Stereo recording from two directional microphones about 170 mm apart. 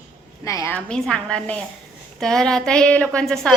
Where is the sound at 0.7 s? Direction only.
5° left (ahead or behind).